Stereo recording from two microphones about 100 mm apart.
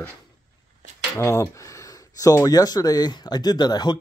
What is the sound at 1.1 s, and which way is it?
Speech, 25° left (ahead or behind).